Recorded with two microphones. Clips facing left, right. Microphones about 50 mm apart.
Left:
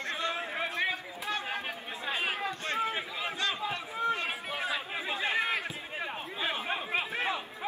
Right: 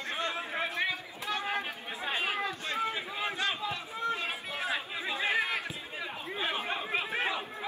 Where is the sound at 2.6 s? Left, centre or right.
Left.